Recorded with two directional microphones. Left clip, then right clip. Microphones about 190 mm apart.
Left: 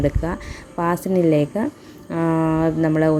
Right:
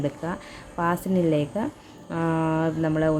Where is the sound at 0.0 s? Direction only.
20° left (ahead or behind).